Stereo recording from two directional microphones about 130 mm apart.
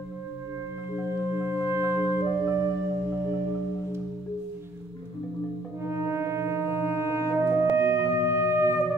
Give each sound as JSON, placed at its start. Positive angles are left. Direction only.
{"t": 0.9, "sound": "music", "side_deg": -20}
{"t": 5.9, "sound": "music", "side_deg": -20}